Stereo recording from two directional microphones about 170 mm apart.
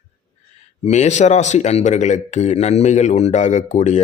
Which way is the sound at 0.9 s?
45° left (ahead or behind).